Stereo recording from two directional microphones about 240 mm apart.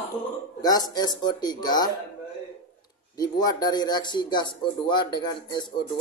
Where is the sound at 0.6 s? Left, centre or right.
Centre.